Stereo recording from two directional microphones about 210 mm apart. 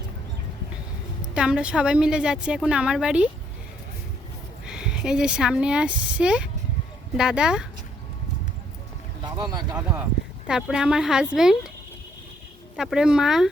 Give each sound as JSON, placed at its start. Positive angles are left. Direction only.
{"t": 1.3, "sound": "a woman's voice", "side_deg": -5}
{"t": 4.6, "sound": "a woman's voice", "side_deg": -5}
{"t": 9.2, "sound": "speech", "side_deg": -20}
{"t": 10.4, "sound": "a woman's voice", "side_deg": -5}
{"t": 12.7, "sound": "a woman's voice", "side_deg": 0}